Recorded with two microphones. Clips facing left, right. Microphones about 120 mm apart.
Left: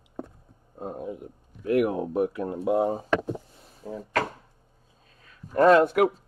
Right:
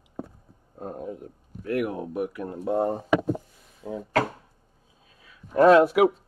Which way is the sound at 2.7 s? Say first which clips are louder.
Left 1 dB; 5° left (ahead or behind).